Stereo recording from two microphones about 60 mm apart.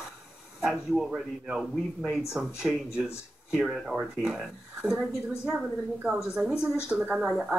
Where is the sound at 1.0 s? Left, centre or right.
Centre.